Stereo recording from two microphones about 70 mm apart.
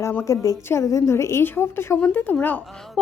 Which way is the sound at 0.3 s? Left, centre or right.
Left.